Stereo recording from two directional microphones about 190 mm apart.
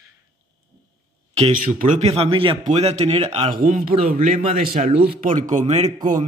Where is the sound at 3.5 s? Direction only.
50° right (ahead or behind).